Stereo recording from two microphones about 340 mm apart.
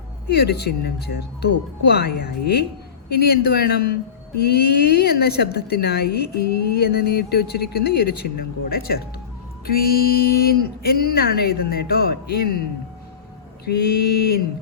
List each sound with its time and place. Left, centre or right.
0.3 s speech: left